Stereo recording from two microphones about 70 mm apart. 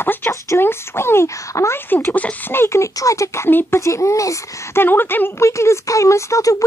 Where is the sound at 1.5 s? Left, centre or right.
Left.